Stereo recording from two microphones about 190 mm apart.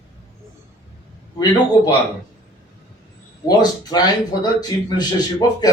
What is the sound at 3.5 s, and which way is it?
Speech, 20° left (ahead or behind).